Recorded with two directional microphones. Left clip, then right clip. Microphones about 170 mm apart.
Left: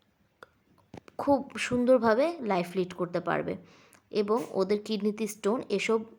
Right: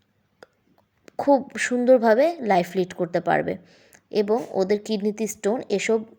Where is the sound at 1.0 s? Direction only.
15° right (ahead or behind).